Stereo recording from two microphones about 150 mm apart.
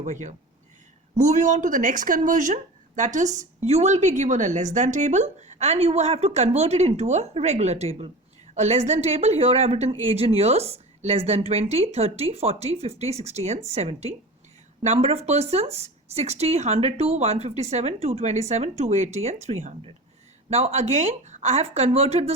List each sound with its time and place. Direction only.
0.0 s speech: 55° right (ahead or behind)